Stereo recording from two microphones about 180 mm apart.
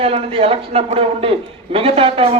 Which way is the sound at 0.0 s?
30° right (ahead or behind).